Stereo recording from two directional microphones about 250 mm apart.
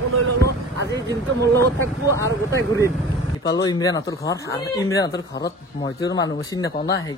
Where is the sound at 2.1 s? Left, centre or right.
Centre.